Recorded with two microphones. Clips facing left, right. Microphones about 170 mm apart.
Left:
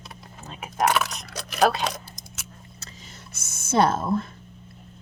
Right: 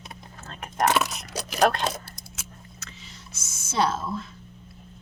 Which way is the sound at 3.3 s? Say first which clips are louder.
Left 5 dB; 55° left (ahead or behind).